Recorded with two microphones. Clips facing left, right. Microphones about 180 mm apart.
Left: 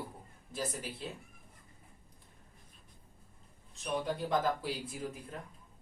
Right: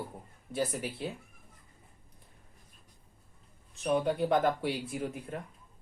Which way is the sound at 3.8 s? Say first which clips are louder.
Right 7 dB; 65° right (ahead or behind).